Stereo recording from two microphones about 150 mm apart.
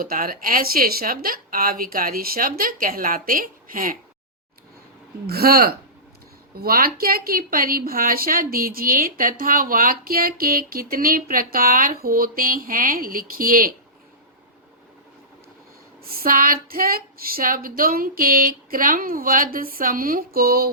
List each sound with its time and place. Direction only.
0.0 s a woman's voice: 70° right (ahead or behind)
5.2 s a woman's voice: 90° right; by 13.7 s 70° right (ahead or behind)
16.0 s a woman's voice: 80° right